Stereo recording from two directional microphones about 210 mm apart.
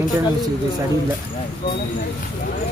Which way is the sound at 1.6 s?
50° left (ahead or behind).